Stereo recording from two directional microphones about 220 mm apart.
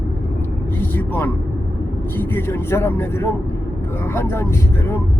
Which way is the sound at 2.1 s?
10° left (ahead or behind).